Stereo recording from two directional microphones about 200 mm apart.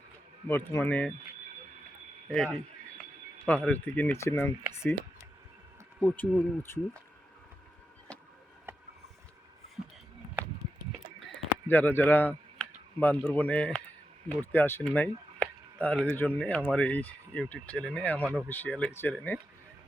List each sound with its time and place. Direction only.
0.4 s speech: 10° left (ahead or behind)
2.3 s speech: 5° left (ahead or behind)
6.0 s speech: 5° left (ahead or behind)
11.7 s speech: 10° left (ahead or behind)